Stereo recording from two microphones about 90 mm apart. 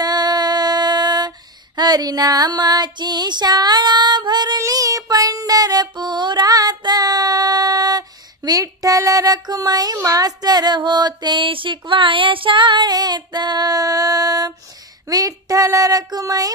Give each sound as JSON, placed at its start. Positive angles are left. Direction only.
{"t": 0.0, "sound": "a sound", "side_deg": -50}
{"t": 1.8, "sound": "female singing", "side_deg": -45}
{"t": 4.6, "sound": "child singing", "side_deg": -40}
{"t": 15.0, "sound": "female singing", "side_deg": -45}